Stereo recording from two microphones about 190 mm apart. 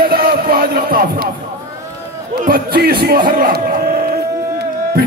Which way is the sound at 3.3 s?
50° right (ahead or behind).